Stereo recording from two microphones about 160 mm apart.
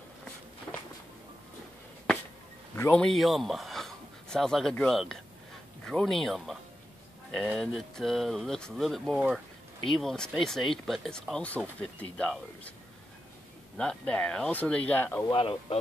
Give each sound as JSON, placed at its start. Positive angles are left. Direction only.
{"t": 2.9, "sound": "speech", "side_deg": 5}
{"t": 13.7, "sound": "speech", "side_deg": 5}
{"t": 15.2, "sound": "speech", "side_deg": 35}